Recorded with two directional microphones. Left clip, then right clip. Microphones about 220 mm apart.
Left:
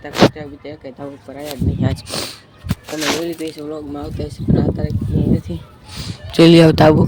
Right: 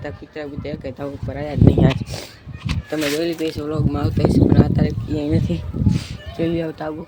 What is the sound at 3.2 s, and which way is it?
Speech, 5° right (ahead or behind).